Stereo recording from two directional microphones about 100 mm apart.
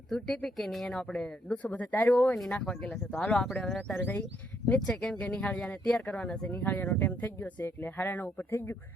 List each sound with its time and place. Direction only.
0.1 s speech: 5° left (ahead or behind); by 8.7 s 20° left (ahead or behind)